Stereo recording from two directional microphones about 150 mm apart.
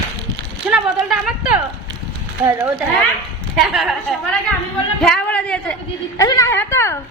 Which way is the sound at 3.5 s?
Centre (ahead or behind).